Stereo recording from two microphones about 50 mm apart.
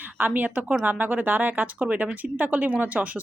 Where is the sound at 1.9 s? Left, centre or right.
Right.